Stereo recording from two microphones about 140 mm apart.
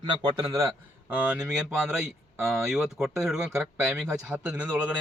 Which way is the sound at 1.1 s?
10° right (ahead or behind).